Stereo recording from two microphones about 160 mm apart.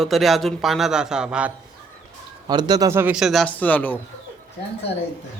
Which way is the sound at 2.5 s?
25° right (ahead or behind).